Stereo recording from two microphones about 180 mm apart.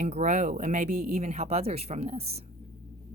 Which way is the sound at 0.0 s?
40° right (ahead or behind).